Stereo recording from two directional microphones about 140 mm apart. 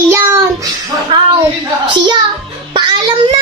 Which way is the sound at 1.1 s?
35° right (ahead or behind).